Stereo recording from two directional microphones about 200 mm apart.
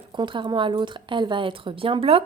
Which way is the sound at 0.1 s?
25° right (ahead or behind).